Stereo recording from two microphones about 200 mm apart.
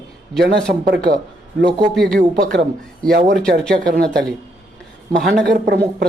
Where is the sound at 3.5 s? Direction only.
50° right (ahead or behind).